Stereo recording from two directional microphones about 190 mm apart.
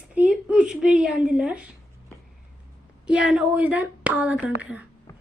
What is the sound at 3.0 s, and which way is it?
A woman's voice, 5° right (ahead or behind).